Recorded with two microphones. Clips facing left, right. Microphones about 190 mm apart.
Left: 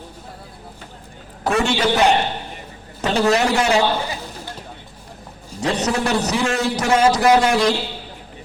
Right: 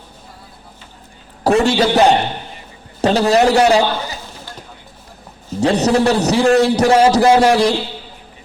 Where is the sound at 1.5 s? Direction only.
35° right (ahead or behind).